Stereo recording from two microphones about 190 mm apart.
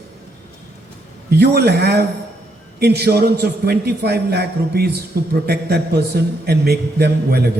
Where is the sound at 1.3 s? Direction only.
60° right (ahead or behind).